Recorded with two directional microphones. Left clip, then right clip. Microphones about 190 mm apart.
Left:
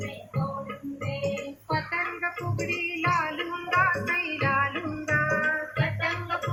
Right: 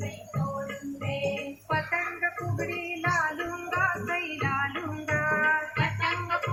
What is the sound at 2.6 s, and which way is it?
Music, 30° right (ahead or behind).